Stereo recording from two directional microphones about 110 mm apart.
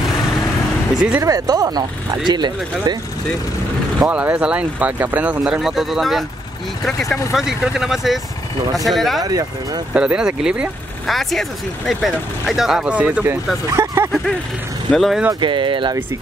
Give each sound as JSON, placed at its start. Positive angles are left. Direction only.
{"t": 1.2, "sound": "speech", "side_deg": -35}
{"t": 4.0, "sound": "speech", "side_deg": -10}
{"t": 9.2, "sound": "speech", "side_deg": -35}
{"t": 9.9, "sound": "speech", "side_deg": -10}
{"t": 14.9, "sound": "speech", "side_deg": 0}
{"t": 15.4, "sound": "speech", "side_deg": -50}